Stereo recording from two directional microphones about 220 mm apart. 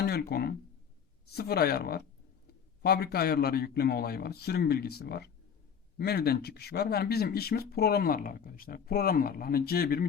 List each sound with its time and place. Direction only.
0.0 s speech: 45° left (ahead or behind)